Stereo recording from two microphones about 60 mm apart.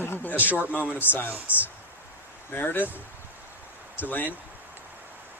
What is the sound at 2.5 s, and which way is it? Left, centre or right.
Speech, left.